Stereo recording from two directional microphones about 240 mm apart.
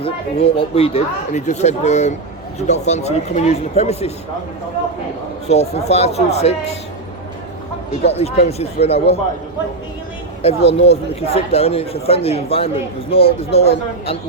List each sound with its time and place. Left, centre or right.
0.0 s speech: left
5.5 s speech: left
8.0 s speech: left
10.4 s speech: left